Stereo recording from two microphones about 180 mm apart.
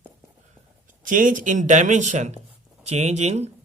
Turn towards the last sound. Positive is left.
turn(degrees=-40)  # may be behind; listen again after turning